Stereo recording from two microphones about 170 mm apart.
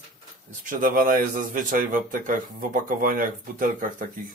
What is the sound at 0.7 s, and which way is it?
A man's voice, 50° right (ahead or behind).